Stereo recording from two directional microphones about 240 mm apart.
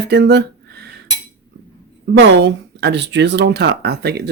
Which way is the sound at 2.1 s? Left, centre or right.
Right.